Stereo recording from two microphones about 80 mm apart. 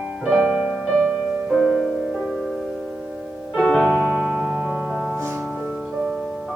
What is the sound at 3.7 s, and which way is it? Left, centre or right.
Piano, centre.